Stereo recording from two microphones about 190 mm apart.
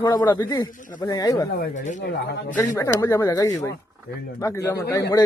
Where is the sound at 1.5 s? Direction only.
45° left (ahead or behind).